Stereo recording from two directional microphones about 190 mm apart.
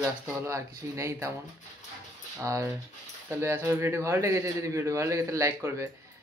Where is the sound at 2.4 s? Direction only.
15° right (ahead or behind).